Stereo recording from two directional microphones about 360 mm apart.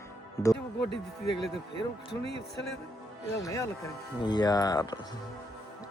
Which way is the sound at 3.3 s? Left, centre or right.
Centre.